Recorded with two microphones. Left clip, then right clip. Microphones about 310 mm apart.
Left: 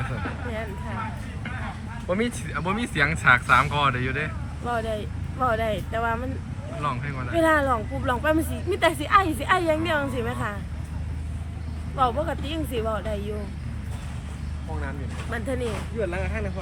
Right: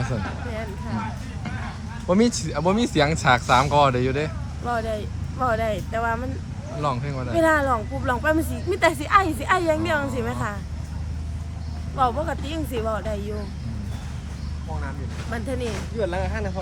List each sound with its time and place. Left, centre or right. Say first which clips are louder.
2.0 s speech: right 6 dB; right
4.6 s speech: right 2 dB; centre
6.8 s speech: right 3 dB; centre
11.9 s speech: right 1 dB; centre
15.3 s speech: even; centre
16.0 s speech: right 4 dB; right